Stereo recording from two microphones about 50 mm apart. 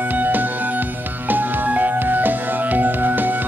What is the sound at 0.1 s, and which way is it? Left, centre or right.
Music, right.